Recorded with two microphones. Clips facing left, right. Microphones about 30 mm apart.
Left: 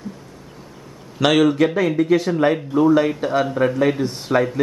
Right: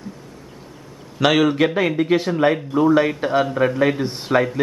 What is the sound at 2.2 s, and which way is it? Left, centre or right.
Speech, centre.